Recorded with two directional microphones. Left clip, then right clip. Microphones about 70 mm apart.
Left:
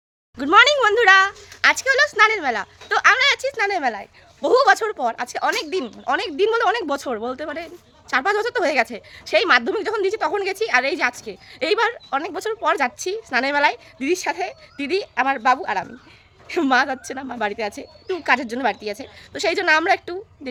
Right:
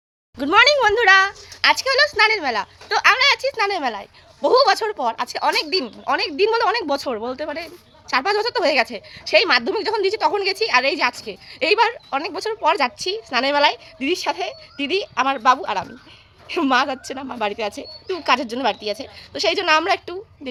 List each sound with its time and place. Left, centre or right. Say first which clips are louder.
0.3 s speech: even; left
1.6 s speech: even; left
4.4 s a woman's voice: even; left
5.8 s speech: right 1 dB; left
6.3 s a woman's voice: even; left
9.7 s a woman's voice: right 1 dB; left
15.1 s a woman's voice: right 1 dB; left
16.5 s a woman's voice: even; left
19.3 s speech: right 1 dB; left